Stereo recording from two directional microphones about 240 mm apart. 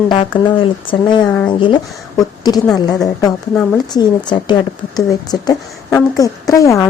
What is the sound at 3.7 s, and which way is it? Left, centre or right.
Speech, centre.